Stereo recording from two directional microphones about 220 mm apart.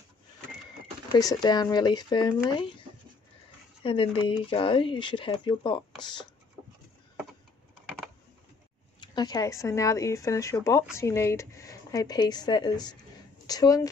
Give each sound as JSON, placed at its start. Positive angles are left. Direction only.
{"t": 1.1, "sound": "speech", "side_deg": 20}
{"t": 3.8, "sound": "speech", "side_deg": 25}
{"t": 9.0, "sound": "speech", "side_deg": 20}